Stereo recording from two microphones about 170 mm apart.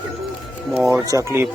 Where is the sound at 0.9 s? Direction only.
20° right (ahead or behind).